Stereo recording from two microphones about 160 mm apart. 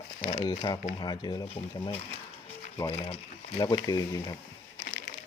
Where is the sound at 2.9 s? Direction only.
40° left (ahead or behind).